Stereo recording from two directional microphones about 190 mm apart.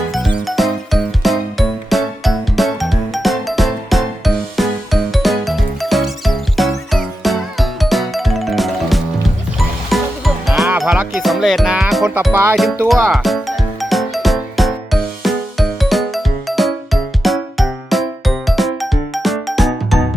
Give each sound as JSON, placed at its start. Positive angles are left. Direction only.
{"t": 0.3, "sound": "music", "side_deg": 0}
{"t": 12.9, "sound": "speech", "side_deg": 0}
{"t": 13.8, "sound": "music", "side_deg": 0}